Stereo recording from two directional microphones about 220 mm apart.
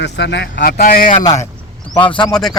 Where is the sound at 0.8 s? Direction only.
40° left (ahead or behind).